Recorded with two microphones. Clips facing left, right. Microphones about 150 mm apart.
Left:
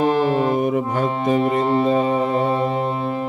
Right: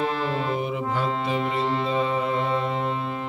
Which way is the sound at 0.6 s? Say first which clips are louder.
Left 7 dB; 50° left (ahead or behind).